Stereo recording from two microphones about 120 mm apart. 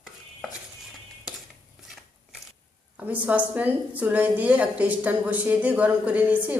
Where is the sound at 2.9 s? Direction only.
10° right (ahead or behind).